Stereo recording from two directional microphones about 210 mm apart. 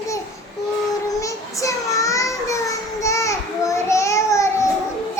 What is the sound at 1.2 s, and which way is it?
Child singing, 15° left (ahead or behind).